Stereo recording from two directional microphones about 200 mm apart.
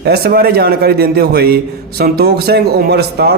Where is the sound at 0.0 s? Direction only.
55° right (ahead or behind).